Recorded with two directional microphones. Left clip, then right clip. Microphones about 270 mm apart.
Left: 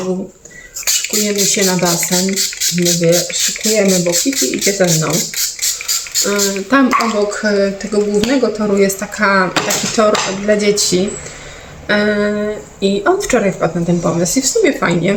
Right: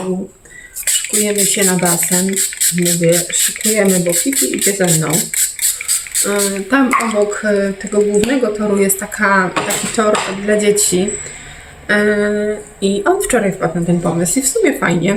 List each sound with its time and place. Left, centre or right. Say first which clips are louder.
1.1 s speech: right 1 dB; centre
2.7 s speech: left 1 dB; centre
6.2 s speech: right 1 dB; centre